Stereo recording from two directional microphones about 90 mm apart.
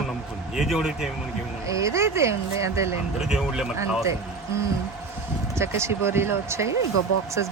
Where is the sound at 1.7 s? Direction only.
35° right (ahead or behind).